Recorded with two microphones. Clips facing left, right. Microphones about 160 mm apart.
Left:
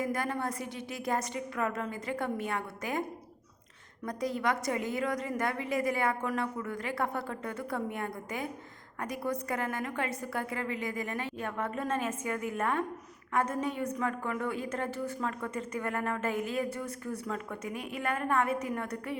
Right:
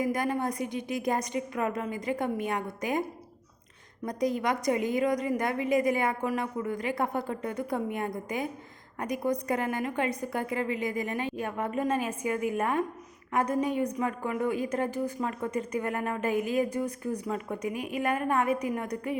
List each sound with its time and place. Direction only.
0.0 s speech: 15° right (ahead or behind)
4.0 s speech: 15° right (ahead or behind)